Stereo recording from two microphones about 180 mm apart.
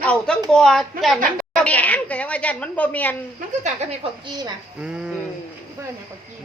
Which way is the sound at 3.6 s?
30° right (ahead or behind).